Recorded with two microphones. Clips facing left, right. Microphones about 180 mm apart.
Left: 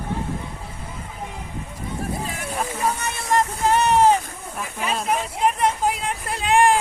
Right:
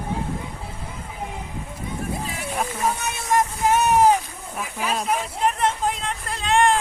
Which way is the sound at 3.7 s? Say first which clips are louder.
Even; 10° right (ahead or behind).